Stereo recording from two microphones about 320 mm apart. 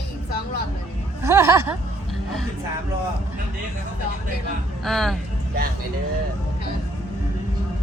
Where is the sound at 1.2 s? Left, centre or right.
Centre.